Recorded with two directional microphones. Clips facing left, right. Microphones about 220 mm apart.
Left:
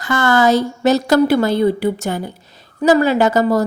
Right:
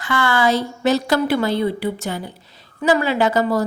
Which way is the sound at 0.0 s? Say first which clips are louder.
Left 4 dB; 45° left (ahead or behind).